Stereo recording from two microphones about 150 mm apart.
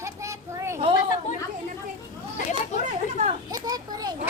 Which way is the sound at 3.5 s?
25° right (ahead or behind).